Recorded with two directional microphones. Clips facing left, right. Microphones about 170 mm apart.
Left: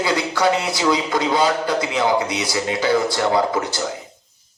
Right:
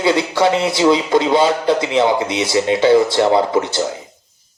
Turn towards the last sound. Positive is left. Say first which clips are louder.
# right 4 dB
turn(degrees=-25)  # may be behind; listen again after turning